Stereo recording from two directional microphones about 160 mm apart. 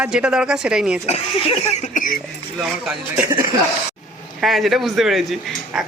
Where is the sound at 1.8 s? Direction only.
55° left (ahead or behind).